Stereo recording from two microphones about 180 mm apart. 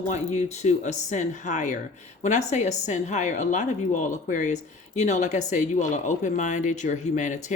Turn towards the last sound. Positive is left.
turn(degrees=40)  # may be behind; listen again after turning